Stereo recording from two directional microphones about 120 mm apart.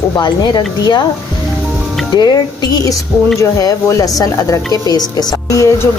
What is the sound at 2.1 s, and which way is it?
A woman's voice, 35° left (ahead or behind).